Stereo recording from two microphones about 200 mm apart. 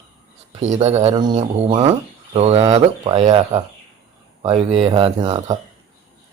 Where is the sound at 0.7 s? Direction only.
35° right (ahead or behind).